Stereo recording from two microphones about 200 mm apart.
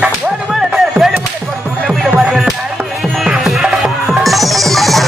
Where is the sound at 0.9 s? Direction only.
5° right (ahead or behind).